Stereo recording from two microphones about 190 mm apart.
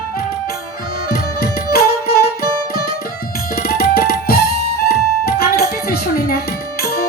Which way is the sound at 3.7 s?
55° left (ahead or behind).